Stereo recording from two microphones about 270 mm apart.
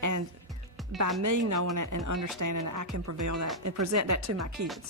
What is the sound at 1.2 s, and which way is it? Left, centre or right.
Speech, right.